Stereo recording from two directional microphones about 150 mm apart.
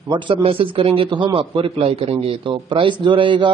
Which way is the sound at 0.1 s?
30° right (ahead or behind).